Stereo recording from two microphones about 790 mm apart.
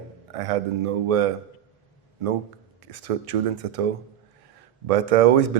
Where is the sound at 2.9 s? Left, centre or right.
Right.